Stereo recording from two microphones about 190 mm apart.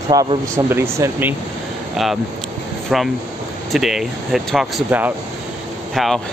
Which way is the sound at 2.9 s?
Centre (ahead or behind).